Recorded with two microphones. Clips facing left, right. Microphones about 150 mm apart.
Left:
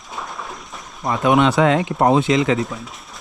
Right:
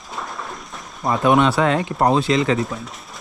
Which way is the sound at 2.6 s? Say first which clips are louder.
Even; centre (ahead or behind).